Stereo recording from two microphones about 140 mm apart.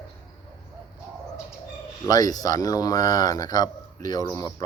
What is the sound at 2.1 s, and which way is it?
Speech, 25° left (ahead or behind).